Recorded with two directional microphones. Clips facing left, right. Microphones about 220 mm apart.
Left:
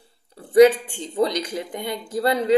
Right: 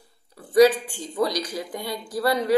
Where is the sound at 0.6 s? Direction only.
25° left (ahead or behind).